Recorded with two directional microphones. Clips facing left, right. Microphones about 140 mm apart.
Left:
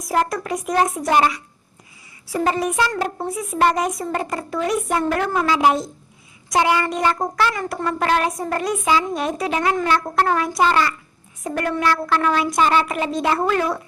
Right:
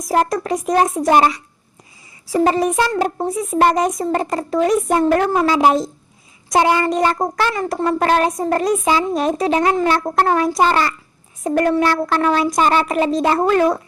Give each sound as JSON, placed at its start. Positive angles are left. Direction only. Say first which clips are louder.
{"t": 0.1, "sound": "speech", "louder": "right 4 dB", "side_deg": -35}